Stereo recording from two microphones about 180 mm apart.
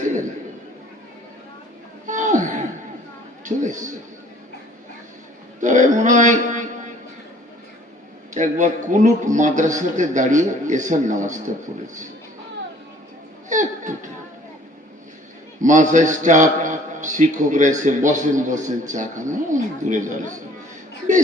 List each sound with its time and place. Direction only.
2.0 s a sound: 45° right (ahead or behind)
3.4 s a man's voice: 45° right (ahead or behind)
5.5 s a man's voice: 45° right (ahead or behind)
8.3 s a man's voice: 45° right (ahead or behind)
13.5 s a sound: 45° right (ahead or behind)
15.6 s a man's voice: 45° right (ahead or behind)